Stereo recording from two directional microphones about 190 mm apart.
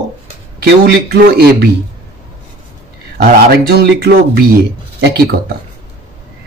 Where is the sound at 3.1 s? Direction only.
55° right (ahead or behind).